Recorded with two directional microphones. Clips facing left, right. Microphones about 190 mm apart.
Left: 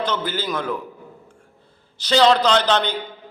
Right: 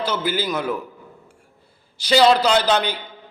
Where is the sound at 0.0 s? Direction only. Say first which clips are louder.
Right 1 dB; 10° right (ahead or behind).